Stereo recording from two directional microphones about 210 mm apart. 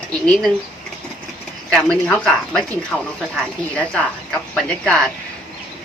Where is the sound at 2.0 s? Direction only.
5° left (ahead or behind).